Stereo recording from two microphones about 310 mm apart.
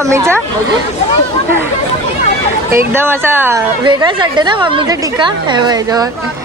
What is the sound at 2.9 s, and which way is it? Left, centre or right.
A woman's voice, centre.